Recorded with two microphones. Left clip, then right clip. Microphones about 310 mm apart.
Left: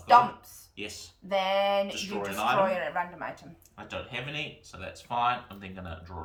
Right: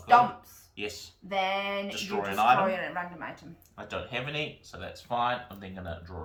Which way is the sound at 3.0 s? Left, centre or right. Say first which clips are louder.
Left 4 dB; centre.